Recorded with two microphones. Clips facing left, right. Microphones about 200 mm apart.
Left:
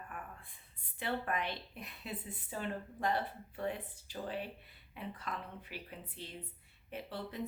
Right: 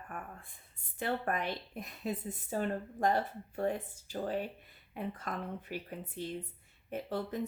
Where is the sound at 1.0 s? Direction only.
45° right (ahead or behind).